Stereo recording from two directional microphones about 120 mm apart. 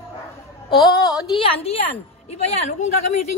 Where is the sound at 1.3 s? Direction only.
55° left (ahead or behind).